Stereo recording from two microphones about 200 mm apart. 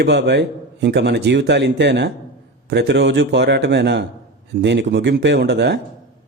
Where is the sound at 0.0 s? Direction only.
60° right (ahead or behind).